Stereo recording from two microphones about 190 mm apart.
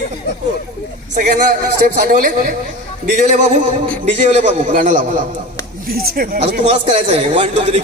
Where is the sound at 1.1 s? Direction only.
45° right (ahead or behind).